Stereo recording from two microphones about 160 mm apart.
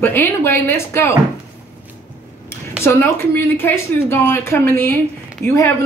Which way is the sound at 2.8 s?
15° left (ahead or behind).